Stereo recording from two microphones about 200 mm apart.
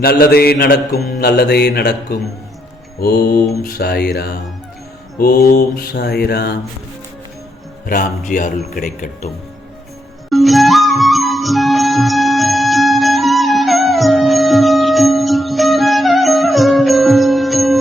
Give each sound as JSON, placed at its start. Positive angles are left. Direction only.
{"t": 0.0, "sound": "mantra", "side_deg": 50}
{"t": 7.9, "sound": "a man's voice", "side_deg": 40}
{"t": 10.2, "sound": "music", "side_deg": 0}